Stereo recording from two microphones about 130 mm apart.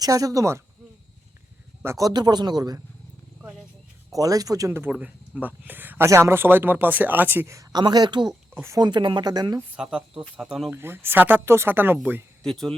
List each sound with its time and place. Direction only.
0.0 s speech: 25° right (ahead or behind)
1.8 s speech: 25° right (ahead or behind)
4.1 s speech: 25° right (ahead or behind)
8.9 s speech: 35° right (ahead or behind)
9.6 s speech: 5° right (ahead or behind)
10.7 s speech: 15° right (ahead or behind)
12.4 s speech: 5° left (ahead or behind)